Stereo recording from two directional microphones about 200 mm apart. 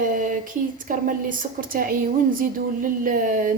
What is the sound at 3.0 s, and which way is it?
Speech, 45° right (ahead or behind).